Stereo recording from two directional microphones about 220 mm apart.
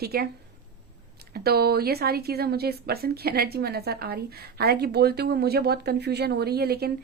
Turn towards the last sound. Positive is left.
turn(degrees=-45)  # may be behind; listen again after turning